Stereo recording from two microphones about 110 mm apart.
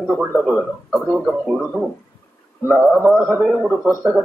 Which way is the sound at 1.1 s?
10° right (ahead or behind).